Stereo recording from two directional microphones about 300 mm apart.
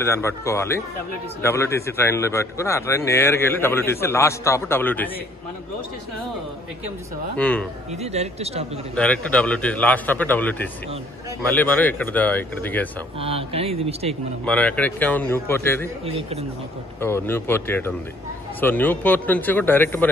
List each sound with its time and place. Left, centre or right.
0.0 s a man's voice: centre
7.3 s a man's voice: centre
8.0 s speech: right
8.9 s a man's voice: centre
13.2 s speech: centre
14.4 s a man's voice: centre
17.0 s a man's voice: centre